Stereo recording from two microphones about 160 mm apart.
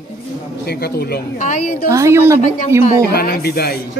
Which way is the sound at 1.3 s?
50° left (ahead or behind).